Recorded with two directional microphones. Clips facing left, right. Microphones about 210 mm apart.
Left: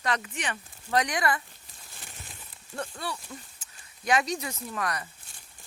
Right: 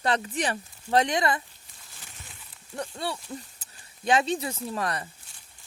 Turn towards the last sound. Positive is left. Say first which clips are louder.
# right 3 dB
turn(degrees=-30)  # may be behind; listen again after turning